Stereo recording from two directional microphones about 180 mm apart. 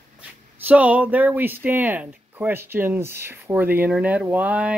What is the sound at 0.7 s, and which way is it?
Speech, 10° right (ahead or behind).